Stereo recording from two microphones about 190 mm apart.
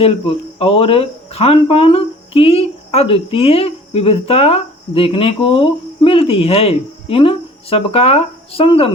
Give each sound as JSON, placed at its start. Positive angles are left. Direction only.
{"t": 0.6, "sound": "speech", "side_deg": 30}